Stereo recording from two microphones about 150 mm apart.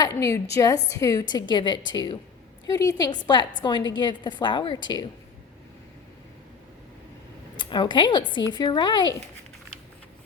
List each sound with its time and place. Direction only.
0.0 s a woman's voice: 20° left (ahead or behind)
7.5 s speech: 30° left (ahead or behind)